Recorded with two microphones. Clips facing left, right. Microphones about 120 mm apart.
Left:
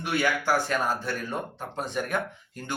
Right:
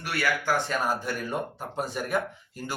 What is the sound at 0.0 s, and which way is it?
Speech, 20° left (ahead or behind).